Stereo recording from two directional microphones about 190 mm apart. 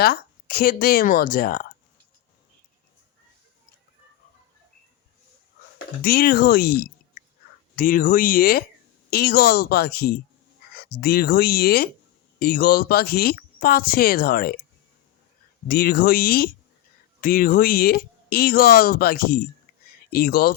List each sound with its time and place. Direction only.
0.0 s speech: 50° left (ahead or behind)
6.0 s a woman's voice: 50° left (ahead or behind)
15.6 s speech: 50° left (ahead or behind)